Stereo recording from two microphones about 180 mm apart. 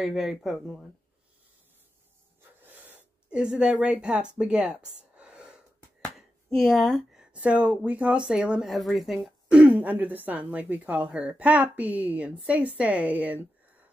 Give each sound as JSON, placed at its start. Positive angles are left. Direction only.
{"t": 0.0, "sound": "speech", "side_deg": 0}
{"t": 2.6, "sound": "gasp", "side_deg": -10}
{"t": 3.3, "sound": "speech", "side_deg": -5}